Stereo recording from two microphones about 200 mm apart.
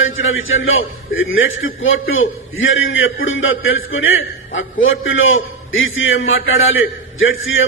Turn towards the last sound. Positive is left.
turn(degrees=75)  # may be behind; listen again after turning